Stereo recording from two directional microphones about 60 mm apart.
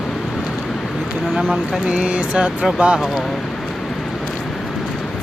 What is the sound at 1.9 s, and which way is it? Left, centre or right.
Speech, right.